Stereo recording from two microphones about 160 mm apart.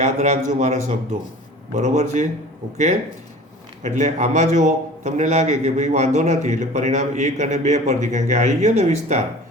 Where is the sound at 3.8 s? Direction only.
50° right (ahead or behind).